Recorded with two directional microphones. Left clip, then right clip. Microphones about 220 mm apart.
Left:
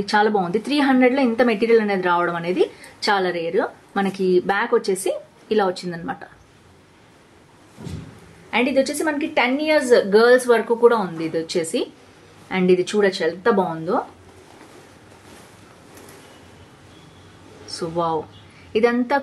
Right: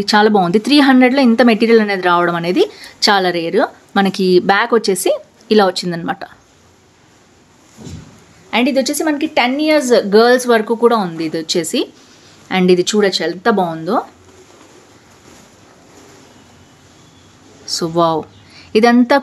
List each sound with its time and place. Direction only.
0.0 s speech: 50° right (ahead or behind)
8.5 s speech: 45° right (ahead or behind)
17.6 s a woman's voice: 50° right (ahead or behind)